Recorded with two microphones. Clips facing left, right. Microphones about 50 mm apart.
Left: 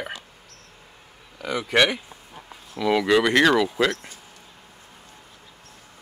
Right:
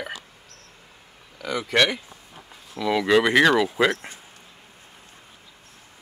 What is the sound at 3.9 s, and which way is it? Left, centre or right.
Speech, right.